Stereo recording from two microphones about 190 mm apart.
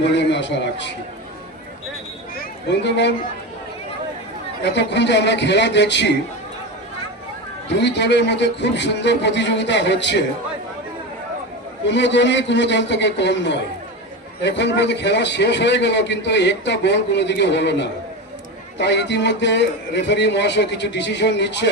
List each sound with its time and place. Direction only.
0.0 s a man's voice: 65° left (ahead or behind)
2.4 s speech: 65° left (ahead or behind)
4.6 s a man's voice: 65° left (ahead or behind)
7.7 s a man's voice: 65° left (ahead or behind)
11.9 s a man's voice: 70° left (ahead or behind)